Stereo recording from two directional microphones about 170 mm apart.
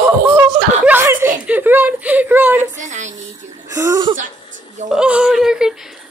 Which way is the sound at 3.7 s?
20° right (ahead or behind).